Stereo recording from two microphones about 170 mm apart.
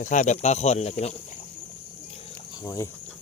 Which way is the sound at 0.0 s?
45° left (ahead or behind).